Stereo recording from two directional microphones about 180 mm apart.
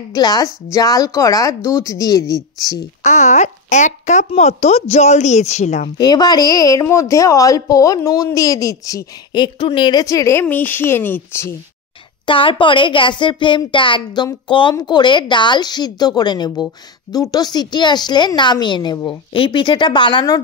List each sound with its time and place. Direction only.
0.1 s a woman's voice: 20° left (ahead or behind)
3.0 s speech: 40° left (ahead or behind)
5.9 s a woman's voice: 20° left (ahead or behind)
12.3 s a woman's voice: 30° left (ahead or behind)